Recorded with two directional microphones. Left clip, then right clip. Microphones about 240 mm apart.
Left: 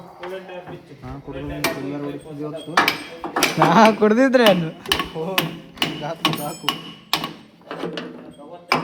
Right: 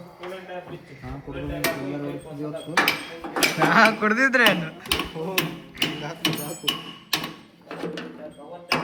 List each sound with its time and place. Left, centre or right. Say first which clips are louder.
1.0 s speech: left 2 dB; centre
3.3 s dishes: left 4 dB; centre
3.7 s speech: left 4 dB; left
4.3 s speech: left 4 dB; centre
5.4 s hammer: left 2 dB; centre
6.2 s a sound: left 3 dB; centre